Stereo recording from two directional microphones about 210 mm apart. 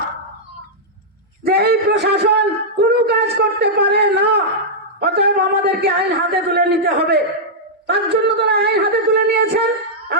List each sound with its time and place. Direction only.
1.5 s a man's voice: 50° right (ahead or behind)